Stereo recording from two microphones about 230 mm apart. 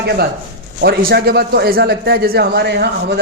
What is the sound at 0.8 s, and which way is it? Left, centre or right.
A man's voice, right.